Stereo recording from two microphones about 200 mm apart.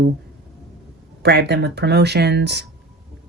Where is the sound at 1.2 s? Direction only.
55° right (ahead or behind).